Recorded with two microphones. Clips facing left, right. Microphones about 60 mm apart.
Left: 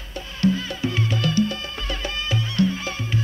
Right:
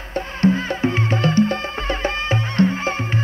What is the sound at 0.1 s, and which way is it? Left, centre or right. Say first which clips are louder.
Music: right 4 dB; right.